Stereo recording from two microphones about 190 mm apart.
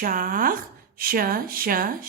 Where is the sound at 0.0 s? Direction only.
45° right (ahead or behind).